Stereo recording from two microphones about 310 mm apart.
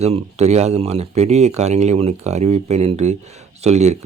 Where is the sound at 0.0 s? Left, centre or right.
Right.